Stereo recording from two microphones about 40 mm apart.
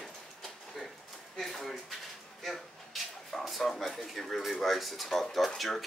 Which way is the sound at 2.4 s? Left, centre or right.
Centre.